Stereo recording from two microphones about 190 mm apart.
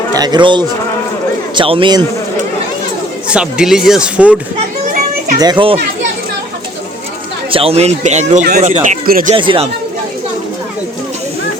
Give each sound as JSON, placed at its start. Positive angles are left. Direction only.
{"t": 0.1, "sound": "a man's voice", "side_deg": -20}
{"t": 3.2, "sound": "speech", "side_deg": -5}
{"t": 4.9, "sound": "music", "side_deg": -45}
{"t": 5.4, "sound": "a man's voice", "side_deg": -25}
{"t": 7.5, "sound": "speech", "side_deg": -30}
{"t": 9.3, "sound": "a man's voice", "side_deg": -25}